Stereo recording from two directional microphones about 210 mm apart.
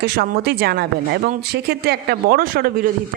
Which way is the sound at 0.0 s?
50° right (ahead or behind).